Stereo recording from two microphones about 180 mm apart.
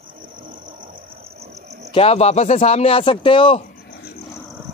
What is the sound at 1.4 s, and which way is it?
Cricket, 40° right (ahead or behind).